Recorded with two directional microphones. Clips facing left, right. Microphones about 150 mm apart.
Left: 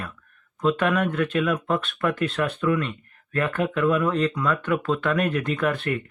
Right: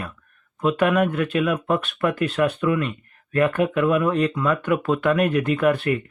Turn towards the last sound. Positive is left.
turn(degrees=-10)  # may be behind; listen again after turning